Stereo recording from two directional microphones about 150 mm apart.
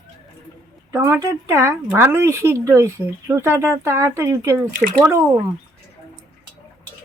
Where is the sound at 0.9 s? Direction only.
20° right (ahead or behind).